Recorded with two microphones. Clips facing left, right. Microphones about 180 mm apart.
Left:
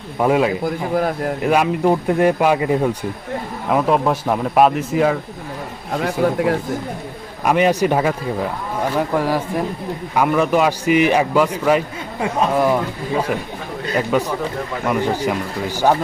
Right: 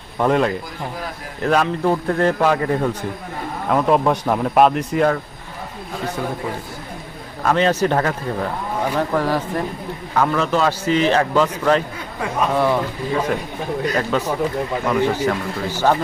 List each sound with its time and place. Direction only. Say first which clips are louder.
0.2 s a man's voice: left 1 dB; 5° left (ahead or behind)
0.6 s speech: left 10 dB; 55° left (ahead or behind)
1.5 s a man's voice: left 1 dB; 10° left (ahead or behind)
3.7 s speech: even; centre (ahead or behind)
6.0 s a man's voice: left 7 dB; 75° left (ahead or behind)
7.4 s a man's voice: left 2 dB; 15° left (ahead or behind)